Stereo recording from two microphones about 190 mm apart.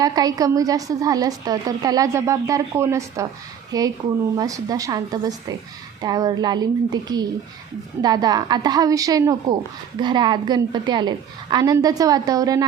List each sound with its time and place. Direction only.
0.0 s a woman's voice: 20° right (ahead or behind)